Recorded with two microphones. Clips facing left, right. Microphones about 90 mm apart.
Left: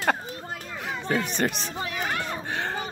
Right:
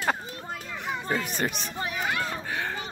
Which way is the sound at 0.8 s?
80° left.